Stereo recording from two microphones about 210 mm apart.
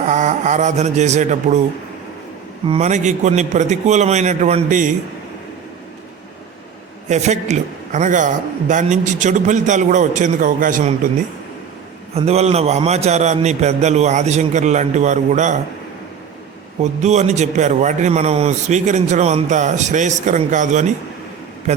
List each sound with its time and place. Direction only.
0.1 s speech: 35° right (ahead or behind)
2.6 s a man's voice: 30° right (ahead or behind)
7.1 s a man's voice: 35° right (ahead or behind)
12.1 s a man's voice: 30° right (ahead or behind)
16.8 s a man's voice: 35° right (ahead or behind)